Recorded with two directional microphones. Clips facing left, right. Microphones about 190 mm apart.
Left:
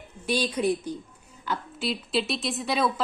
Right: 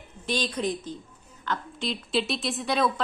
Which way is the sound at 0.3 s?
10° left (ahead or behind).